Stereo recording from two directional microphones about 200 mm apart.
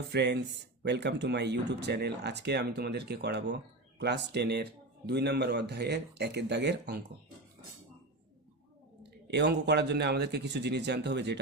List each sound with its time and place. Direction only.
0.1 s speech: 60° right (ahead or behind)
9.2 s speech: 60° right (ahead or behind)